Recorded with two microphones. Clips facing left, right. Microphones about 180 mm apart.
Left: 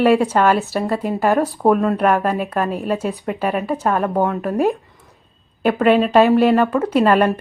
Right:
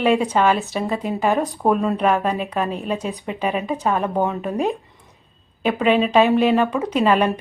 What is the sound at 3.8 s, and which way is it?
Speech, 5° left (ahead or behind).